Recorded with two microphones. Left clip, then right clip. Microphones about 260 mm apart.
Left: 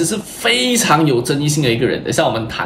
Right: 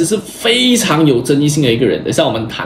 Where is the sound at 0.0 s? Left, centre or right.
Centre.